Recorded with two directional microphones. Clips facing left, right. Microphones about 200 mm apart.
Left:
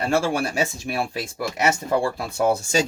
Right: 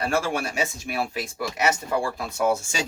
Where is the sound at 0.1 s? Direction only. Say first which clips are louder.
Left 4 dB; 30° left (ahead or behind).